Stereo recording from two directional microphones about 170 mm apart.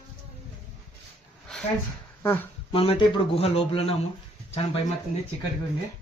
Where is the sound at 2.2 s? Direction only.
10° left (ahead or behind).